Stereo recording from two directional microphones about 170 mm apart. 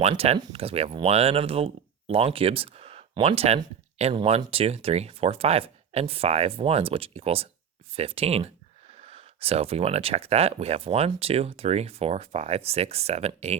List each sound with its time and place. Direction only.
0.0 s speech: 35° right (ahead or behind)